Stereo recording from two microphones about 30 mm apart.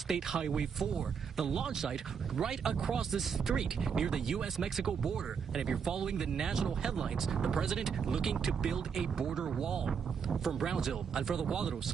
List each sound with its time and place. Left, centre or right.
0.1 s speech: centre
9.8 s speech: centre